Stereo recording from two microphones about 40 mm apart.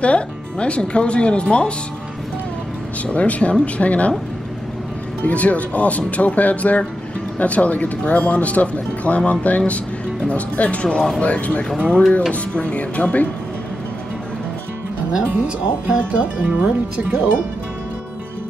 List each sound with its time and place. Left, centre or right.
0.0 s speech: left
3.1 s speech: left
5.2 s speech: left
15.1 s speech: right